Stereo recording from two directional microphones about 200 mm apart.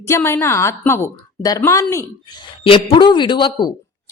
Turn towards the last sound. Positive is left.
turn(degrees=25)  # may be behind; listen again after turning